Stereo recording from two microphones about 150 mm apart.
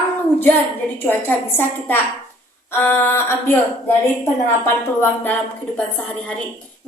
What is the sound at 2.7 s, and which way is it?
Speech, 15° left (ahead or behind).